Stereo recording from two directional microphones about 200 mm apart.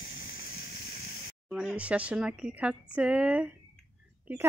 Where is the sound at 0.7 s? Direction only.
50° left (ahead or behind).